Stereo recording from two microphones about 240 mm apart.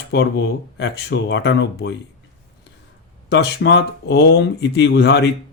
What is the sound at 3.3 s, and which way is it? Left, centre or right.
Speech, left.